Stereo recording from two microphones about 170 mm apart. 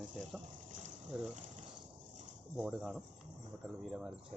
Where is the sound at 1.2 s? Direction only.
45° right (ahead or behind).